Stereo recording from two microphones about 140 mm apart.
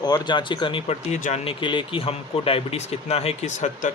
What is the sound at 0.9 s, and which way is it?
Speech, 60° left (ahead or behind).